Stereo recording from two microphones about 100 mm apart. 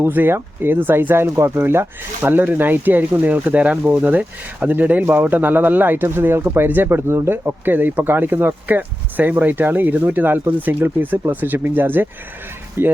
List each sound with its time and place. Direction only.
0.0 s speech: 20° right (ahead or behind)